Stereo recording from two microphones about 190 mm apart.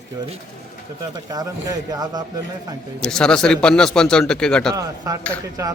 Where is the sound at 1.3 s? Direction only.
20° right (ahead or behind).